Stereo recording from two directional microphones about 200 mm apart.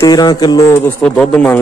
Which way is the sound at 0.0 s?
20° left (ahead or behind).